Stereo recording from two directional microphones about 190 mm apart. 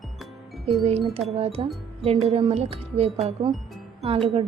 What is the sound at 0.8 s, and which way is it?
Speech, 30° right (ahead or behind).